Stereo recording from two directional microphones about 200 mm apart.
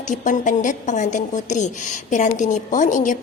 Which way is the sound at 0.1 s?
40° left (ahead or behind).